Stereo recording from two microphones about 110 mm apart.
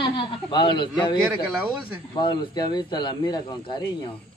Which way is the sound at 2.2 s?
45° left (ahead or behind).